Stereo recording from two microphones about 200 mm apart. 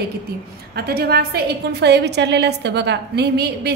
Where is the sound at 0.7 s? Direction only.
50° right (ahead or behind).